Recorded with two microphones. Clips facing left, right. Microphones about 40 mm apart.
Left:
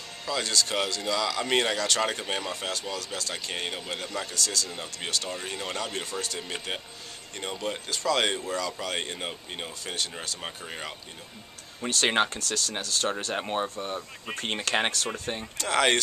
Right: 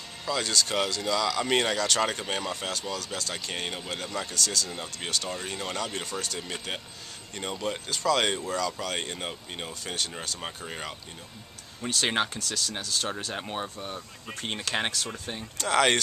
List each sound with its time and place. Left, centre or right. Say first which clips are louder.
0.2 s speech: even; centre
13.2 s speech: left 4 dB; centre
15.5 s speech: right 1 dB; centre